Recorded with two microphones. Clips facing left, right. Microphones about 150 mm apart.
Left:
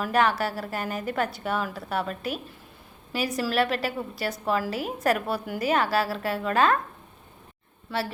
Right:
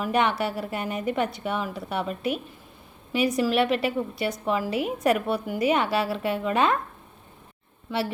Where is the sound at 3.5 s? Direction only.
Centre (ahead or behind).